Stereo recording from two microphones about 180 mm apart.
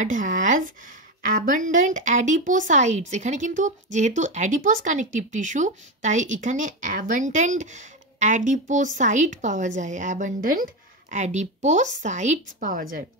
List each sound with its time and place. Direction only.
0.0 s speech: 45° right (ahead or behind)